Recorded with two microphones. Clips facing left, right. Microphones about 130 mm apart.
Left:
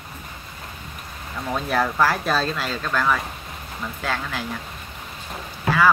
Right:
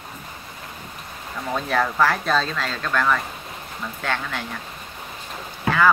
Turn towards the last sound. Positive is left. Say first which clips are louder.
# even
turn(degrees=5)  # may be behind; listen again after turning